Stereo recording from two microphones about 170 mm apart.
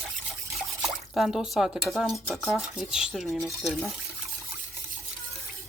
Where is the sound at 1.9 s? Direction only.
Centre (ahead or behind).